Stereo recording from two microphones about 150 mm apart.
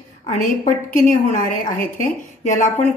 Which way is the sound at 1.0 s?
60° left (ahead or behind).